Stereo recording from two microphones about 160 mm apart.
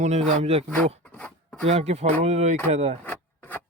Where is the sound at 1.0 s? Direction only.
10° left (ahead or behind).